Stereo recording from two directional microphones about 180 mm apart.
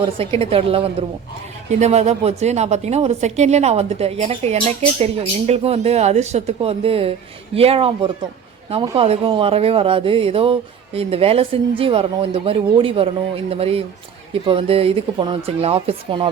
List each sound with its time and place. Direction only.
0.0 s a woman's voice: 30° right (ahead or behind)